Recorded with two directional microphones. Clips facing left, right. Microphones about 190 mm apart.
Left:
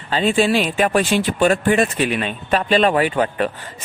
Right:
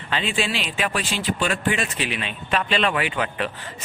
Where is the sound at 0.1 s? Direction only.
40° left (ahead or behind).